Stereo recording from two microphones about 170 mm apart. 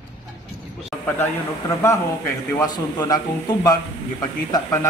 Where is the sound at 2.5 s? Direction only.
25° left (ahead or behind).